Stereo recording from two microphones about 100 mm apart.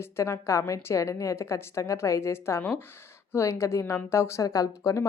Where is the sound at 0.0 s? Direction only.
25° left (ahead or behind).